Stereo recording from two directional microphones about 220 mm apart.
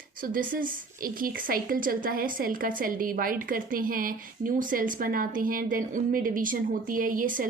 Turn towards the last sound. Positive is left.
turn(degrees=-40)  # may be behind; listen again after turning